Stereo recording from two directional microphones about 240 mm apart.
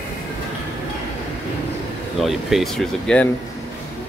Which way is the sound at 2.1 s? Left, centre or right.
Centre.